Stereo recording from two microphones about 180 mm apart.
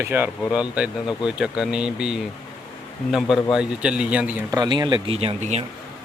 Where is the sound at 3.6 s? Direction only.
5° right (ahead or behind).